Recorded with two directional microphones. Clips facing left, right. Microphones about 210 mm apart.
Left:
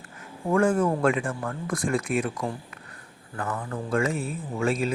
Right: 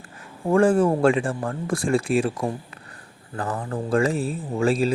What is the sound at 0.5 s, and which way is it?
Speech, 30° right (ahead or behind).